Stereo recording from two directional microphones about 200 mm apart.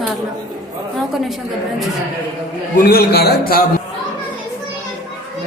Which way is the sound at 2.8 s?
50° left (ahead or behind).